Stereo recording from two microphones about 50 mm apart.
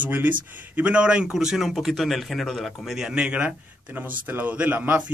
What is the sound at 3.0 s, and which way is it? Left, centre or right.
Speech, centre.